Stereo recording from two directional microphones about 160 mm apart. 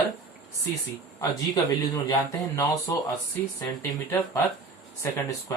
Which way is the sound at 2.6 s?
20° left (ahead or behind).